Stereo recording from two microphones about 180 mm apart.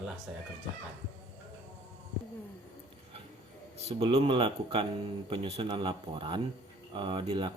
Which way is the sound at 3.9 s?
35° right (ahead or behind).